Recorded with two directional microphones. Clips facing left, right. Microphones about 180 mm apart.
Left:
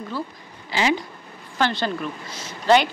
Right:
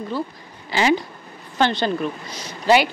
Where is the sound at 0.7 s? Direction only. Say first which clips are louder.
Right 3 dB; 50° right (ahead or behind).